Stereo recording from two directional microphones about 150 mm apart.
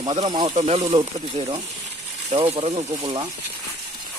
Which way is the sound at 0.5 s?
45° right (ahead or behind).